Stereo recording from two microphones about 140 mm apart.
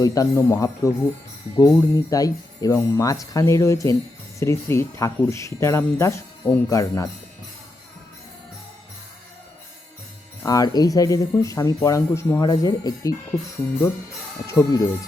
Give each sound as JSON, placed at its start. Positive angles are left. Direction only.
{"t": 0.0, "sound": "speech", "side_deg": 25}
{"t": 10.4, "sound": "speech", "side_deg": 25}
{"t": 14.4, "sound": "speech", "side_deg": 25}